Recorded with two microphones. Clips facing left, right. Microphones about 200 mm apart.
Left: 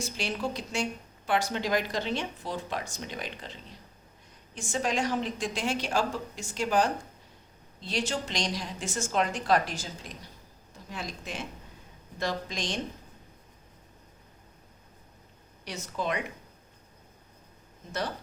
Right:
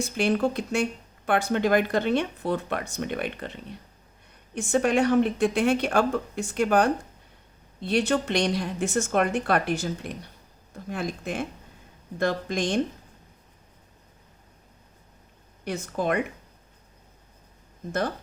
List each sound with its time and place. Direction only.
0.0 s speech: 55° right (ahead or behind)
15.6 s speech: 55° right (ahead or behind)